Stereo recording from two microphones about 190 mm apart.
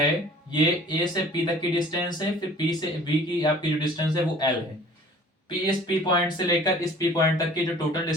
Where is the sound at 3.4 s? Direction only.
20° left (ahead or behind).